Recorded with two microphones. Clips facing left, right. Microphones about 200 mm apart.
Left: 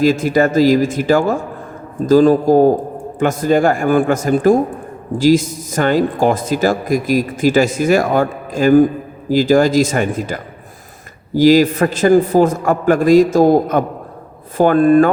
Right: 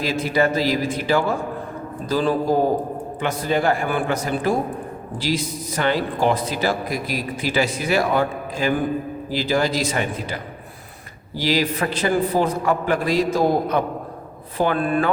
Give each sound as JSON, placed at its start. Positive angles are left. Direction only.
{"t": 0.0, "sound": "a man's voice", "side_deg": 45}